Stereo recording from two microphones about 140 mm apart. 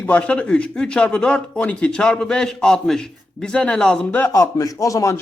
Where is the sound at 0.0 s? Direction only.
10° left (ahead or behind).